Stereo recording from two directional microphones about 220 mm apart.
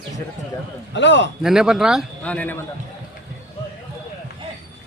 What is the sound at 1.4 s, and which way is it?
Speech, 5° right (ahead or behind).